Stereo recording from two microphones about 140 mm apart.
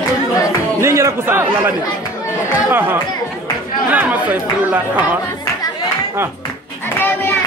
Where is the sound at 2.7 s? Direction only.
15° right (ahead or behind).